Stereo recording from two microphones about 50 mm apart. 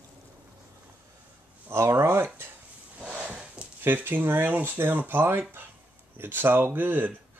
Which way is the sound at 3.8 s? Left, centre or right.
Right.